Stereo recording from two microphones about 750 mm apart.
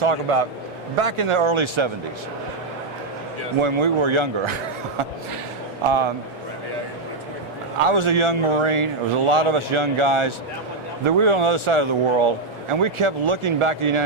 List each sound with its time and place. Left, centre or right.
0.0 s a man's voice: right
3.6 s a man's voice: right
7.9 s a man's voice: right